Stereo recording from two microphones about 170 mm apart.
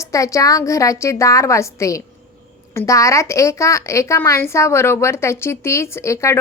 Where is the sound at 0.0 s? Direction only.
20° left (ahead or behind).